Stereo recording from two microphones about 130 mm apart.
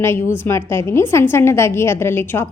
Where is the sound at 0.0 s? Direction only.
20° left (ahead or behind).